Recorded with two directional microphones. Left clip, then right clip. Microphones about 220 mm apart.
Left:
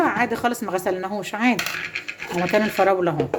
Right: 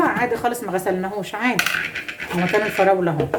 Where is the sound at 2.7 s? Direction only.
35° left (ahead or behind).